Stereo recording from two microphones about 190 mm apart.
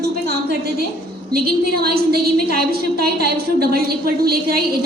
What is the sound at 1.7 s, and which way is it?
A woman's voice, 55° right (ahead or behind).